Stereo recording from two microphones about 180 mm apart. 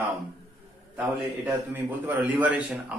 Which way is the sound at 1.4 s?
10° right (ahead or behind).